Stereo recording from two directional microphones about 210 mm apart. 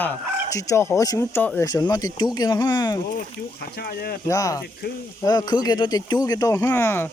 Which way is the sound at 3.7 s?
45° left (ahead or behind).